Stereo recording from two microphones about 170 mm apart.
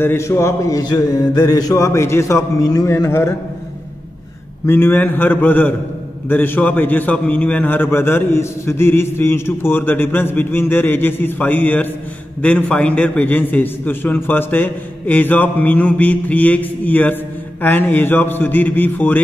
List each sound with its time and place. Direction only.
0.0 s a man's voice: 15° left (ahead or behind)
4.6 s a man's voice: 15° left (ahead or behind)